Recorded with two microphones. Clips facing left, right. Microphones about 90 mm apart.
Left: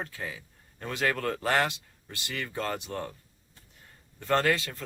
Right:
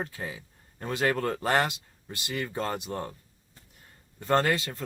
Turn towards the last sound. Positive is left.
turn(degrees=-30)  # may be behind; listen again after turning